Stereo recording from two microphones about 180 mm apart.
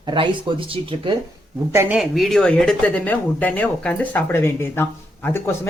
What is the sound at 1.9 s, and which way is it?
Speech, centre (ahead or behind).